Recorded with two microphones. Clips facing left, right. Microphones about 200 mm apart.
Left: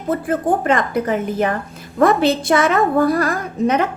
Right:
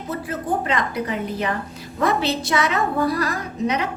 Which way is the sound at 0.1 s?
50° left (ahead or behind).